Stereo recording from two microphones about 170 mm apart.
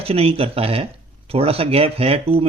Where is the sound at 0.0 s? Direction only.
35° right (ahead or behind).